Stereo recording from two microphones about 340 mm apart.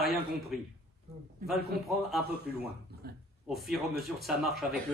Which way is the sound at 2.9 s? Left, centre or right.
Right.